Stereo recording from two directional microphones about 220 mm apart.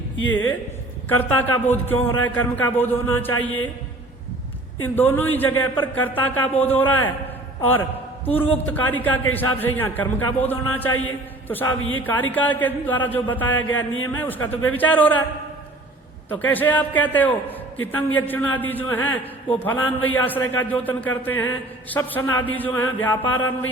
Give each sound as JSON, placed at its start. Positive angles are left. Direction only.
{"t": 0.2, "sound": "speech", "side_deg": 60}
{"t": 1.0, "sound": "a man's voice", "side_deg": 10}
{"t": 4.8, "sound": "a man's voice", "side_deg": 10}
{"t": 11.8, "sound": "speech", "side_deg": 65}
{"t": 12.0, "sound": "a man's voice", "side_deg": 10}
{"t": 16.3, "sound": "a man's voice", "side_deg": 10}